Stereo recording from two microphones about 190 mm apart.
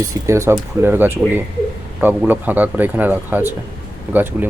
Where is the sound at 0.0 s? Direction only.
15° right (ahead or behind).